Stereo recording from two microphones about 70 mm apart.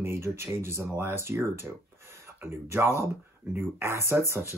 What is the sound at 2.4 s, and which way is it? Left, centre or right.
Speech, right.